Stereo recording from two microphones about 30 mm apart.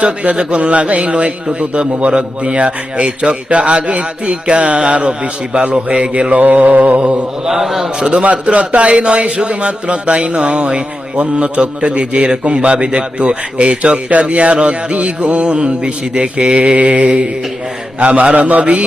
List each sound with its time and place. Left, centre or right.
0.0 s a man's voice: right
6.4 s mantra: right
7.0 s a man's voice: right
7.5 s a man's voice: centre
7.8 s a man's voice: right
8.1 s a man's voice: right
18.0 s a man's voice: right